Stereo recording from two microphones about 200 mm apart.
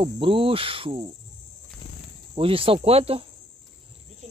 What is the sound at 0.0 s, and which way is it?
Speech, 25° right (ahead or behind).